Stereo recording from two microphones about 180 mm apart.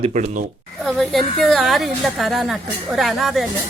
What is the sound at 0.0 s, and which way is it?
Speech, 40° right (ahead or behind).